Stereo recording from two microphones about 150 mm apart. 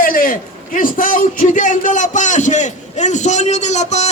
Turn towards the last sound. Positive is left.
turn(degrees=50)  # may be behind; listen again after turning